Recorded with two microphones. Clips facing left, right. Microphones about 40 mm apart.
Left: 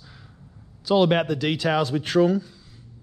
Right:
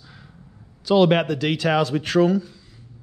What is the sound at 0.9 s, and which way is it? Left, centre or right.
Speech, right.